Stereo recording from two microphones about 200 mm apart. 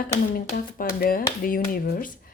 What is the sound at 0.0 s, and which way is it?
Speech, 45° left (ahead or behind).